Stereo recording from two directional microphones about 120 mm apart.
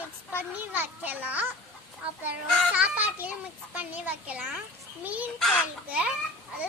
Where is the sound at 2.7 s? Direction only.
15° right (ahead or behind).